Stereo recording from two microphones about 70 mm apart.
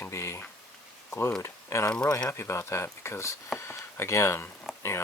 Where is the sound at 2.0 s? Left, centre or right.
Left.